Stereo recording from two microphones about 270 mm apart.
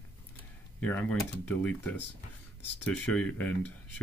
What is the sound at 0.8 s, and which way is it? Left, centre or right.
Speech, centre.